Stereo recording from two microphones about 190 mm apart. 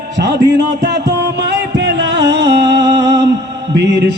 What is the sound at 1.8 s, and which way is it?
Music, 65° right (ahead or behind).